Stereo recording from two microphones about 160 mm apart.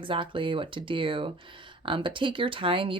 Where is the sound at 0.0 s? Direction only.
30° right (ahead or behind).